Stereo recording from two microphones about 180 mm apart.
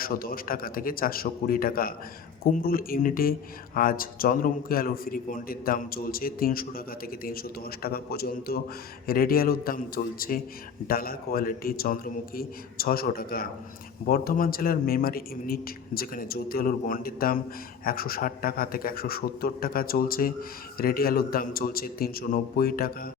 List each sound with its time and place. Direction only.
0.0 s a man's voice: 55° left (ahead or behind)